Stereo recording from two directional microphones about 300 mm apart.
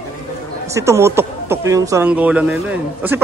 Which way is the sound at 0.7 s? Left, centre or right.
Centre.